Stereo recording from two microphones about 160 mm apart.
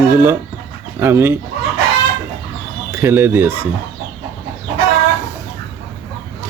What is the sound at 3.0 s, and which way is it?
Speech, 15° right (ahead or behind).